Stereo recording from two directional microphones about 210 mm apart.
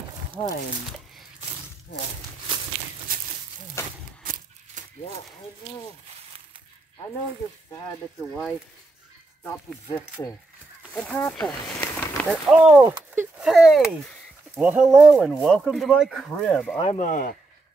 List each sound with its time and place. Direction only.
3.8 s speech: 10° left (ahead or behind)
4.2 s a sound: 40° right (ahead or behind)
9.4 s speech: 10° left (ahead or behind)
12.4 s speech: 5° right (ahead or behind)
16.8 s speech: 35° left (ahead or behind)